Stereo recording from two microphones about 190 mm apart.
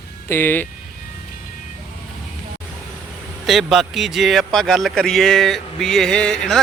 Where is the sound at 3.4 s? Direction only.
Centre (ahead or behind).